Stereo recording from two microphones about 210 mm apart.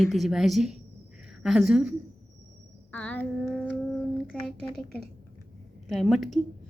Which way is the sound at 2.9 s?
10° left (ahead or behind).